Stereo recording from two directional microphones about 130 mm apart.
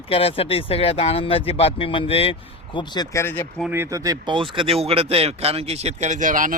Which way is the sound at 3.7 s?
20° right (ahead or behind).